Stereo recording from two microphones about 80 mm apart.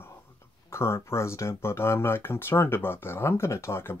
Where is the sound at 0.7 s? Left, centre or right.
Left.